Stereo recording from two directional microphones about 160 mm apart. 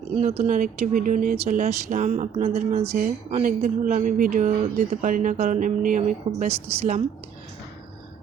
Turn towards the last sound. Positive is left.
turn(degrees=-40)  # may be behind; listen again after turning